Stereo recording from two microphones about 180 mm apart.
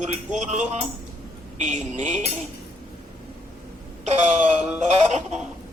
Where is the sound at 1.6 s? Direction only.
40° right (ahead or behind).